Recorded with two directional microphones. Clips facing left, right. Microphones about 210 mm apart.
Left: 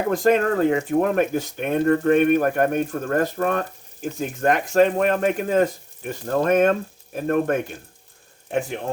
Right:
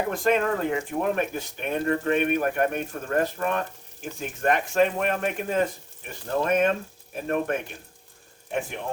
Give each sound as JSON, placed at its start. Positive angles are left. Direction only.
{"t": 0.1, "sound": "speech", "side_deg": 40}